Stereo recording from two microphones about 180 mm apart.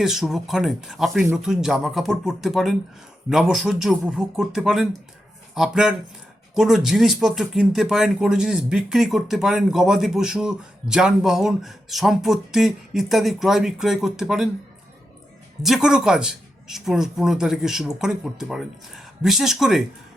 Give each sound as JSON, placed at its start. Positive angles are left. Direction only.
{"t": 0.0, "sound": "speech", "side_deg": 0}
{"t": 15.6, "sound": "speech", "side_deg": -5}